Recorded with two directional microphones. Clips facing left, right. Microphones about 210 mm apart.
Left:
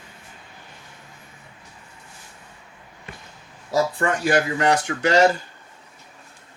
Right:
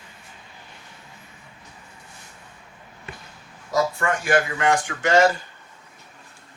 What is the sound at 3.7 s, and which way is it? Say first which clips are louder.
Speech: left 1 dB; 35° left (ahead or behind).